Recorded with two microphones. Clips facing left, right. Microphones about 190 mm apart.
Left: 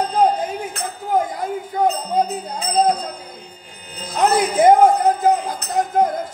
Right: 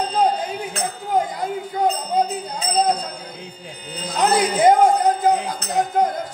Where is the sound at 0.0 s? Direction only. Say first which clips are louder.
Left 2 dB; 50° left (ahead or behind).